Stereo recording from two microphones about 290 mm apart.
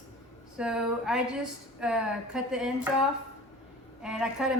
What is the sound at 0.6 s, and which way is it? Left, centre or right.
A woman's voice, centre.